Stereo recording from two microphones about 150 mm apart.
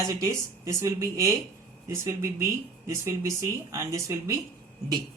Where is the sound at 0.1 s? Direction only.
20° right (ahead or behind).